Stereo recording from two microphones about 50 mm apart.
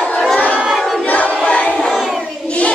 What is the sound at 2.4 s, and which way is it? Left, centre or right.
Child singing, left.